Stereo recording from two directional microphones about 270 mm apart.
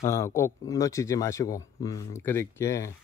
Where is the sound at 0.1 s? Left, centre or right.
Centre.